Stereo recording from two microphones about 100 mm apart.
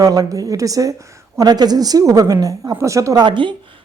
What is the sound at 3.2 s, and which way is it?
Speech, 55° right (ahead or behind).